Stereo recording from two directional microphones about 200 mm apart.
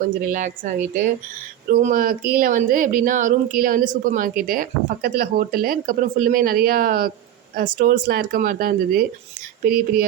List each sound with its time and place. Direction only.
0.0 s a woman's voice: 40° right (ahead or behind)
1.7 s a woman's voice: 40° right (ahead or behind)